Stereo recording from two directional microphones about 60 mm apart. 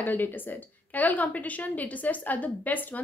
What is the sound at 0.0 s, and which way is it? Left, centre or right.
A woman's voice, left.